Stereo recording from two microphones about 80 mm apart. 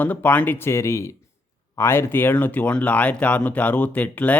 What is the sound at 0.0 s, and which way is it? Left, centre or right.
Speech, left.